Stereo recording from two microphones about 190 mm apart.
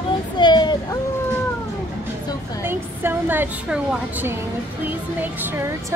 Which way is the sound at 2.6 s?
10° right (ahead or behind).